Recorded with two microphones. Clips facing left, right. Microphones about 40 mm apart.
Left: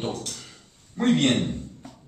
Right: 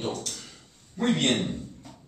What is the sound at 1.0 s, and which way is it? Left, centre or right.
Speech, left.